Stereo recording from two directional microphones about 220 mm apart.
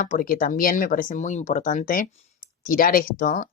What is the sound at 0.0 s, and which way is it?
Speech, 35° left (ahead or behind).